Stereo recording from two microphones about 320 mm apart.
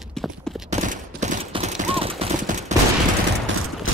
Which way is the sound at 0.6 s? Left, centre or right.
Right.